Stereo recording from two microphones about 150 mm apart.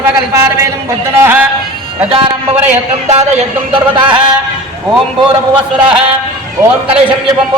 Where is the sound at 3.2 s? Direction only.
45° right (ahead or behind).